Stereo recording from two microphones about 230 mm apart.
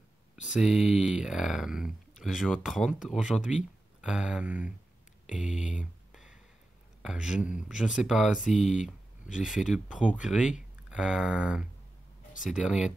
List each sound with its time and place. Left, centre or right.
0.4 s speech: centre
5.6 s speech: left
7.0 s speech: centre